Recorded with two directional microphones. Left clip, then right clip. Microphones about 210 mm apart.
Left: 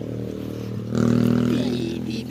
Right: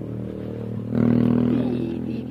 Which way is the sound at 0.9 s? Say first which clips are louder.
Even; 65° left (ahead or behind).